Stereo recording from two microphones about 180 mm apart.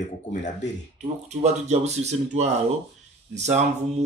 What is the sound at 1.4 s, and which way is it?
Speech, 40° right (ahead or behind).